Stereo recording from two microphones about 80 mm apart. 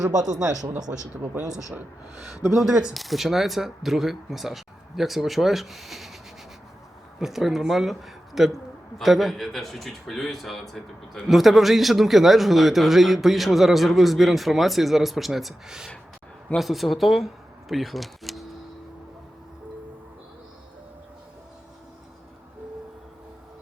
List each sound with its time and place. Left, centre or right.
0.0 s speech: right
0.9 s speech: right
1.4 s a man's voice: centre
7.2 s a man's voice: centre